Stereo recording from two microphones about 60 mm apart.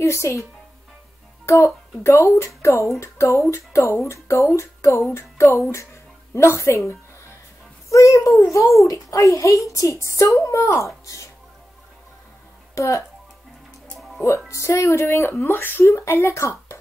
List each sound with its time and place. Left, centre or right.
0.0 s a woman's voice: left
1.4 s music: left
2.0 s speech: left
7.9 s a woman's voice: left
12.7 s speech: left
14.5 s speech: left
15.8 s speech: left